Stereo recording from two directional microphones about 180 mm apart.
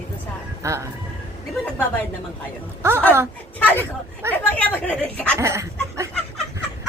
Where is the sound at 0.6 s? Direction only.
15° right (ahead or behind).